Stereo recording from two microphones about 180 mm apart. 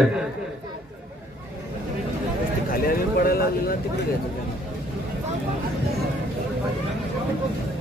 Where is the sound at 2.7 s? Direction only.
55° left (ahead or behind).